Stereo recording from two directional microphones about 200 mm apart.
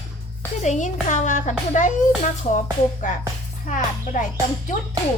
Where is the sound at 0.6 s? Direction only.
35° left (ahead or behind).